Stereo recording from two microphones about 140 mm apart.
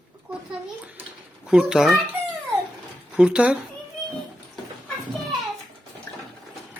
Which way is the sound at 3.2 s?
5° right (ahead or behind).